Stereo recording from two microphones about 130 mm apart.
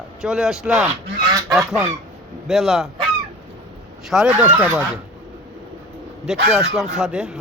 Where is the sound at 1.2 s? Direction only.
25° right (ahead or behind).